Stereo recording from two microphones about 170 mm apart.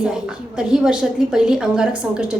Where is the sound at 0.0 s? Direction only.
5° right (ahead or behind).